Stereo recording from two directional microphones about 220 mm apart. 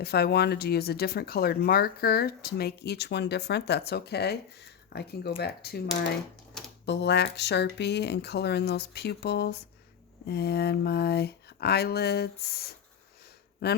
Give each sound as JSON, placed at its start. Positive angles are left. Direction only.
{"t": 0.0, "sound": "speech", "side_deg": 45}